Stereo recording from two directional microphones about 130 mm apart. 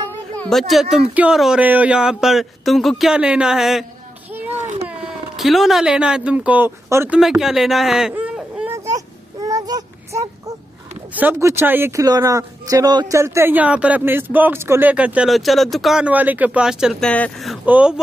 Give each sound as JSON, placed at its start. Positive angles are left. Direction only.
{"t": 0.1, "sound": "speech", "side_deg": 10}
{"t": 4.8, "sound": "speech", "side_deg": -5}
{"t": 7.1, "sound": "speech", "side_deg": -5}
{"t": 8.1, "sound": "whimper", "side_deg": -10}
{"t": 8.9, "sound": "a sound", "side_deg": -25}
{"t": 11.1, "sound": "speech", "side_deg": -15}
{"t": 17.0, "sound": "speech", "side_deg": 5}
{"t": 17.6, "sound": "speech", "side_deg": -10}